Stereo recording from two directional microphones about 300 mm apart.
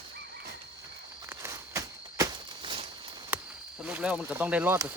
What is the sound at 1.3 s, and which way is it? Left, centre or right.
Walk, centre.